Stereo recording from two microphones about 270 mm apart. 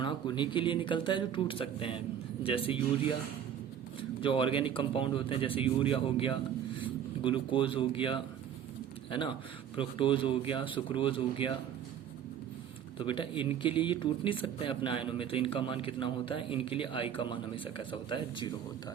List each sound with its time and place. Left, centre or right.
0.0 s a man's voice: centre
4.2 s a man's voice: centre
13.0 s a man's voice: centre